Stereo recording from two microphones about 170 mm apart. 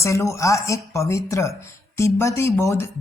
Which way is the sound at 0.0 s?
15° left (ahead or behind).